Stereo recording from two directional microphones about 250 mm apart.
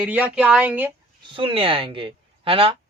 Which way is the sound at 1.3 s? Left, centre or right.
Right.